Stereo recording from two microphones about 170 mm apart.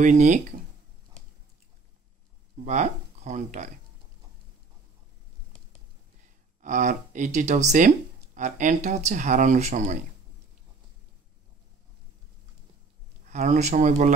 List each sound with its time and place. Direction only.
0.0 s speech: 45° right (ahead or behind)
2.5 s speech: 45° right (ahead or behind)
6.6 s speech: 45° right (ahead or behind)
13.2 s speech: 45° right (ahead or behind)